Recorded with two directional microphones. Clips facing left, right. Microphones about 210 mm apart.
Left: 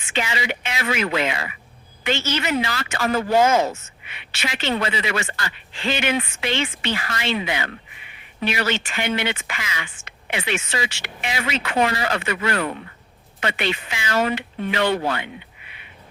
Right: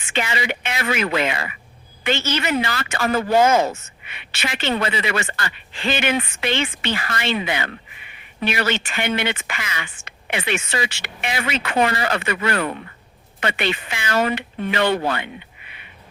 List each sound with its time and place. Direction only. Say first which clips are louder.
0.1 s a woman's voice: right 1 dB; 55° right (ahead or behind)